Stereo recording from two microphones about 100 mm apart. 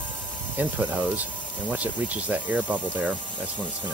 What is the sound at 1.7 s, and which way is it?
Speech, 15° right (ahead or behind).